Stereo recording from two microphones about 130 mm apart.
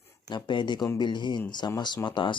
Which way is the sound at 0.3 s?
35° left (ahead or behind).